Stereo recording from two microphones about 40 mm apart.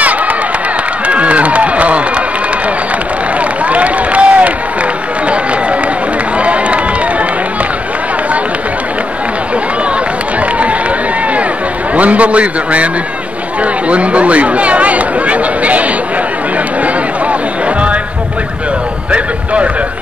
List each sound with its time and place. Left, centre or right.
0.0 s a sound: right
3.3 s run: right
10.4 s a sound: right
11.9 s a man's voice: right
16.5 s music: right
19.1 s a man's voice: right